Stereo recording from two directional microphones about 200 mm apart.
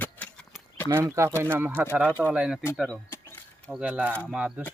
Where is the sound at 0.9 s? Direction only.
15° right (ahead or behind).